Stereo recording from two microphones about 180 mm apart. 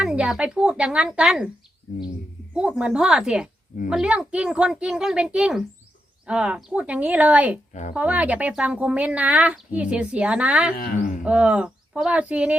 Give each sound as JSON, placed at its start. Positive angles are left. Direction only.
{"t": 0.0, "sound": "speech", "side_deg": -5}
{"t": 2.5, "sound": "speech", "side_deg": -5}
{"t": 7.7, "sound": "speech", "side_deg": 40}
{"t": 7.9, "sound": "speech", "side_deg": -10}
{"t": 10.9, "sound": "speech", "side_deg": 45}
{"t": 11.2, "sound": "speech", "side_deg": -5}